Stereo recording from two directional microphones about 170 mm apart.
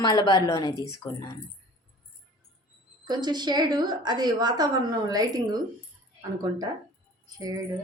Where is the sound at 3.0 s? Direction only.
25° right (ahead or behind).